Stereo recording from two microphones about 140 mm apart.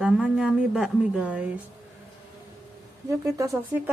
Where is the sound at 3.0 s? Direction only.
25° right (ahead or behind).